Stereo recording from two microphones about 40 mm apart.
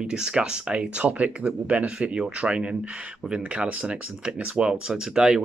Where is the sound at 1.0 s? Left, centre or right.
Right; by 5.3 s centre.